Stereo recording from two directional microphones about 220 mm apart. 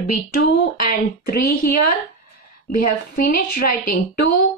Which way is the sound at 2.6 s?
40° left (ahead or behind).